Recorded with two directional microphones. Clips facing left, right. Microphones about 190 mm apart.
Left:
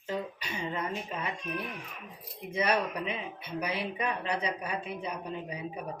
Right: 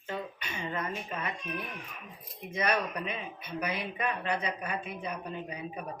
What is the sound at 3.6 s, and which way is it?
Speech, 30° left (ahead or behind).